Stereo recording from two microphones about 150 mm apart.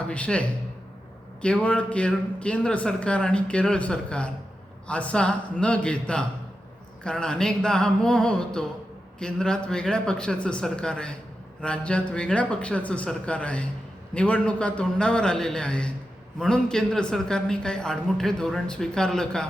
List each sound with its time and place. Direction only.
0.1 s a man's voice: 10° left (ahead or behind)